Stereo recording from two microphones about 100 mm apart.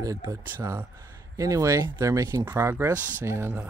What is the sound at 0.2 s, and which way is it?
Speech, 25° right (ahead or behind).